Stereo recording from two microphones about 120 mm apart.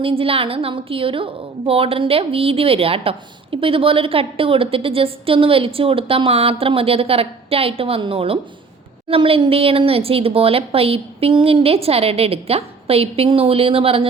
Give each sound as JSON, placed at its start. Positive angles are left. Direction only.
{"t": 0.0, "sound": "a woman's voice", "side_deg": -50}